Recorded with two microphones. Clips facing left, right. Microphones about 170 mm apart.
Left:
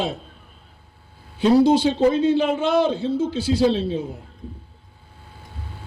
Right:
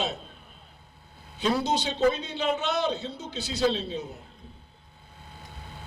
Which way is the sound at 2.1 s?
90° left.